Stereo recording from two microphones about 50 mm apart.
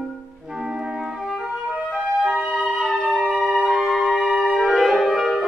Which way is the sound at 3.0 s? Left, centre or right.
Centre.